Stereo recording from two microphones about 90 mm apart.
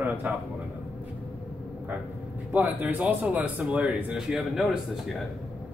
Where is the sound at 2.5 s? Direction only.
20° right (ahead or behind); by 4.7 s centre (ahead or behind).